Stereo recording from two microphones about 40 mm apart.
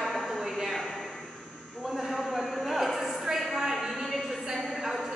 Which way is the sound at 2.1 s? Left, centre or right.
Centre.